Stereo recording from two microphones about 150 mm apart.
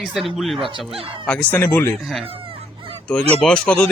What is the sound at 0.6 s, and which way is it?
Speech, 35° right (ahead or behind).